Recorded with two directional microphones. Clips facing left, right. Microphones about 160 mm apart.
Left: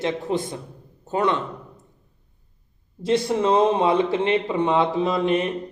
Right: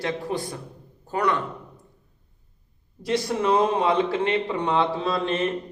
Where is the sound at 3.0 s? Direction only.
20° left (ahead or behind).